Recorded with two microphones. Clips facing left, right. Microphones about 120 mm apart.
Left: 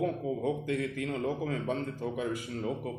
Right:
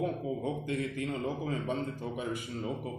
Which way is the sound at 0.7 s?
90° left.